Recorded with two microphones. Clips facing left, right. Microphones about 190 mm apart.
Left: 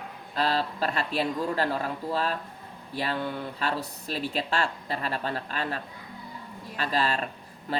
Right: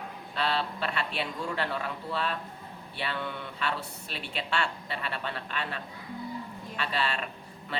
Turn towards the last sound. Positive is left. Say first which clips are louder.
# left 4 dB
turn(degrees=40)  # may be behind; listen again after turning